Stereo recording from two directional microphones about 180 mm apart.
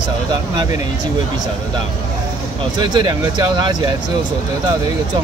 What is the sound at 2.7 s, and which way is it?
Speech, 25° right (ahead or behind).